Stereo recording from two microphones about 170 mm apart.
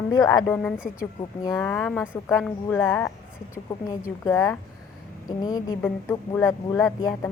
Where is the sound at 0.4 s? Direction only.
5° left (ahead or behind).